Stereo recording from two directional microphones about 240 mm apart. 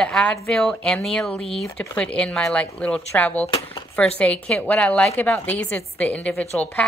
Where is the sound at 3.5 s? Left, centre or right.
Centre.